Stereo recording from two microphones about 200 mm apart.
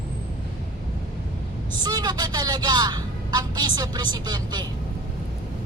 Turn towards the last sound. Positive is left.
turn(degrees=-20)  # may be behind; listen again after turning